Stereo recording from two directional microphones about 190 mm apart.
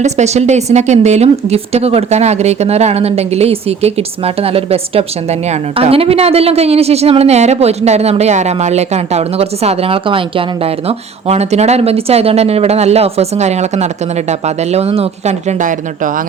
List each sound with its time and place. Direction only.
0.0 s speech: 35° right (ahead or behind)